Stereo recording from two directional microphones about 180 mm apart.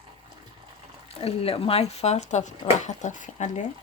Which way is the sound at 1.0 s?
35° left (ahead or behind).